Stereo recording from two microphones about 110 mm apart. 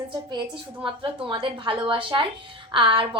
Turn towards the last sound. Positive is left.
turn(degrees=-50)  # may be behind; listen again after turning